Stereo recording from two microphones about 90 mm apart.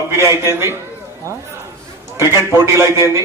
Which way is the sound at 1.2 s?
35° right (ahead or behind).